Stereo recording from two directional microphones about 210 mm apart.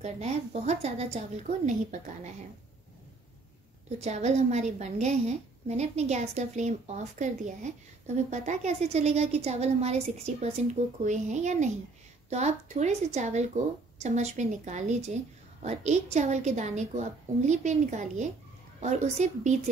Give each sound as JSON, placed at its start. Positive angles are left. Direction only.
{"t": 0.0, "sound": "a woman's voice", "side_deg": -30}
{"t": 4.0, "sound": "a woman's voice", "side_deg": -35}